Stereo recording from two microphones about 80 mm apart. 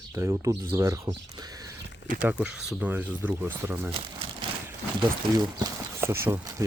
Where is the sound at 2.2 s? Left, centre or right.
Centre.